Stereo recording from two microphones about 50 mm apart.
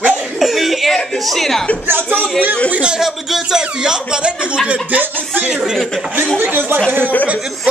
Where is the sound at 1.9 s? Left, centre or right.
Right.